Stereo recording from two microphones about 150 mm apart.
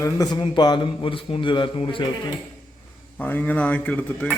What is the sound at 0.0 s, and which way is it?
A man's voice, 25° left (ahead or behind).